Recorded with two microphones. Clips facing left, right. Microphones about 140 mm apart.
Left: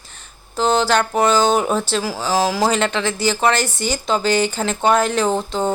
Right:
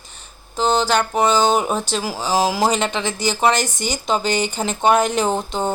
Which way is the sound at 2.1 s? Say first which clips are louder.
Right 1 dB; 20° right (ahead or behind).